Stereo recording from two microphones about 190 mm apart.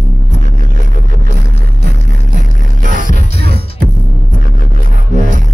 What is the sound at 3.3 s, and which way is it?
Music, 55° right (ahead or behind).